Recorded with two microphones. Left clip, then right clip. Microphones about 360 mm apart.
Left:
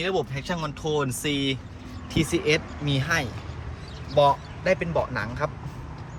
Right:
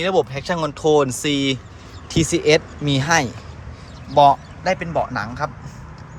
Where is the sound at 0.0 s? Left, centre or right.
Centre.